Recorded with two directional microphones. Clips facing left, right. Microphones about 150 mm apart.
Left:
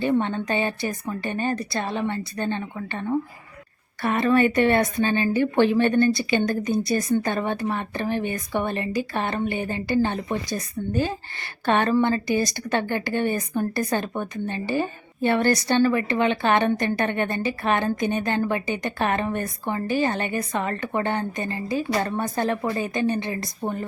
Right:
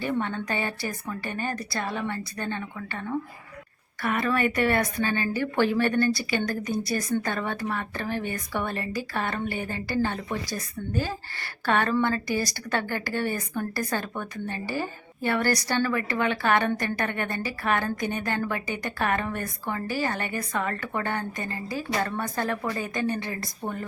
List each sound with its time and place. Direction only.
0.0 s a woman's voice: 25° left (ahead or behind)